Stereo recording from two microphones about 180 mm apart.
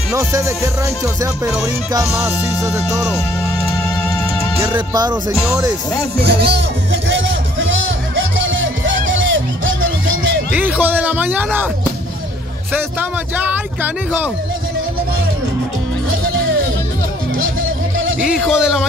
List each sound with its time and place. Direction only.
0.1 s speech: 15° right (ahead or behind)
2.6 s music: 5° right (ahead or behind)
4.6 s speech: 20° right (ahead or behind)
5.3 s music: centre (ahead or behind)
6.2 s music: 70° right (ahead or behind); by 10.1 s 90° right
10.5 s speech: 10° right (ahead or behind)
12.7 s speech: 10° right (ahead or behind)
18.5 s a sound: 5° right (ahead or behind)